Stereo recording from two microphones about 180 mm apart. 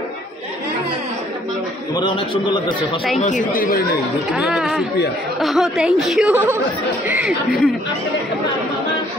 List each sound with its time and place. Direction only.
2.0 s a man's voice: 25° left (ahead or behind)
3.2 s speech: 45° left (ahead or behind)
4.3 s speech: 5° right (ahead or behind)